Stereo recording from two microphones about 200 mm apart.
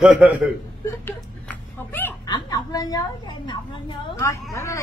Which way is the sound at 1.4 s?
10° left (ahead or behind).